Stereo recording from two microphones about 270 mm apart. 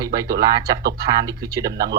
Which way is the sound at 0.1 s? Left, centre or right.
Right.